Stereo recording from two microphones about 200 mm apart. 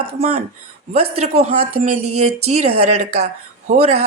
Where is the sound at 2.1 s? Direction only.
90° right.